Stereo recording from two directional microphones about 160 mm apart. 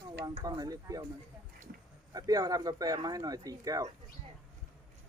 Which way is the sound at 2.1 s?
20° right (ahead or behind).